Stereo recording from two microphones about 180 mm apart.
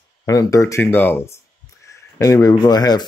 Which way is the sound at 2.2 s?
20° left (ahead or behind).